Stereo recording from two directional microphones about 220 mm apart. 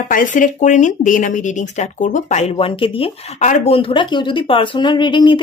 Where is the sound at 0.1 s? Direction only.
35° left (ahead or behind).